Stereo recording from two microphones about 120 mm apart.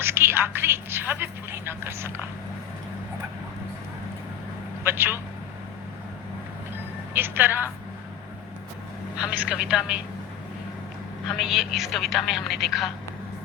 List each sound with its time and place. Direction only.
0.0 s speech: 20° right (ahead or behind)
4.8 s a man's voice: 20° right (ahead or behind)
7.1 s a woman's voice: 15° right (ahead or behind)
9.1 s speech: 10° right (ahead or behind)
11.3 s speech: centre (ahead or behind)